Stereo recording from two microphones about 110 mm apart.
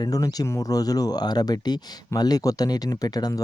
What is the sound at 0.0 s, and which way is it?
Speech, 35° left (ahead or behind).